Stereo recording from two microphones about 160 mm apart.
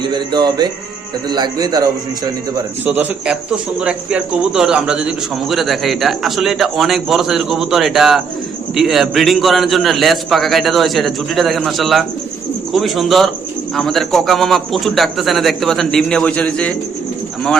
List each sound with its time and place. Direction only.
0.0 s speech: 30° right (ahead or behind)
2.8 s a man's voice: 10° right (ahead or behind); by 16.7 s 10° left (ahead or behind)